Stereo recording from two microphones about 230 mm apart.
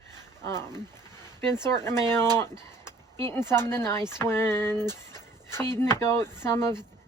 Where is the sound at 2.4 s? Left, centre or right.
Centre.